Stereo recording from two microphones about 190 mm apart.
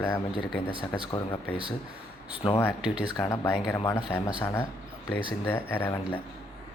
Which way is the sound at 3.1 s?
20° left (ahead or behind).